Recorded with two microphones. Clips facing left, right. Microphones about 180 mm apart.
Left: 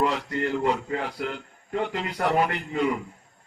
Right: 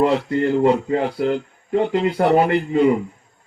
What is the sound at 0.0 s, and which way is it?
Speech, 30° right (ahead or behind).